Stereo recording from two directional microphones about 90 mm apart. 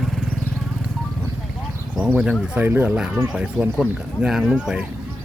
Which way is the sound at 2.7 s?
25° right (ahead or behind).